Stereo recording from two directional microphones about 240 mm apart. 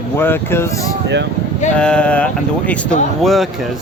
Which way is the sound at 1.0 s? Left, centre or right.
Right.